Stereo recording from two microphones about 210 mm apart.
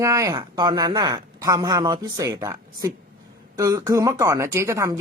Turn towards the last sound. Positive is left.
turn(degrees=-15)  # may be behind; listen again after turning